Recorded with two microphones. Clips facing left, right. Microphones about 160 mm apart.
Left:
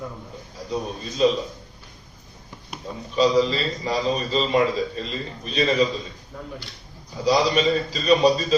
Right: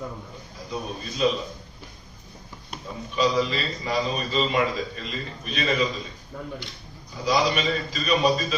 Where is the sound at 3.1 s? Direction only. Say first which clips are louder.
Left 4 dB; 35° left (ahead or behind).